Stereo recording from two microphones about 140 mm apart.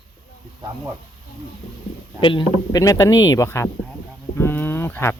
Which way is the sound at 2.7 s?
25° left (ahead or behind).